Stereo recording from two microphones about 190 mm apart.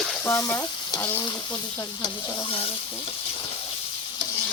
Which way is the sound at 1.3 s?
20° left (ahead or behind).